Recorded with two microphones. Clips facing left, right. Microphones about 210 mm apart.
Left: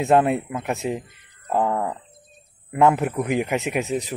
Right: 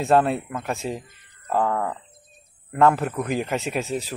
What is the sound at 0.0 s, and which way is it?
Speech, 15° left (ahead or behind).